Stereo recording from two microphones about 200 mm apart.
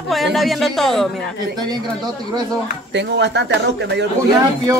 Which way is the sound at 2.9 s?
60° right (ahead or behind).